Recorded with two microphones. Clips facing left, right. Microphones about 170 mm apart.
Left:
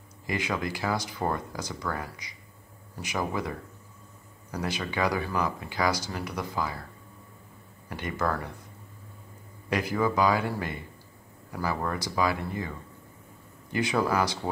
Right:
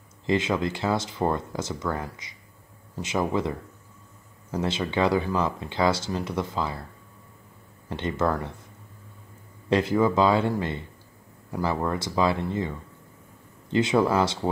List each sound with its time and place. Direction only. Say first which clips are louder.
0.3 s speech: right 6 dB; 25° right (ahead or behind)
7.9 s speech: right 4 dB; 25° right (ahead or behind)
9.7 s speech: right 5 dB; 25° right (ahead or behind)